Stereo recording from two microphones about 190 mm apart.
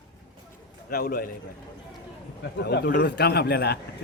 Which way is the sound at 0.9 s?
50° left (ahead or behind).